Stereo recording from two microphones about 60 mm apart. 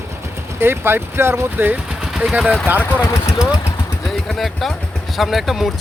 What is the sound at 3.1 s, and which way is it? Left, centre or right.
Speech, left.